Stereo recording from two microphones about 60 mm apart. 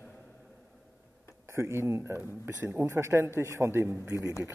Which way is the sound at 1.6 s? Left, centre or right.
Right.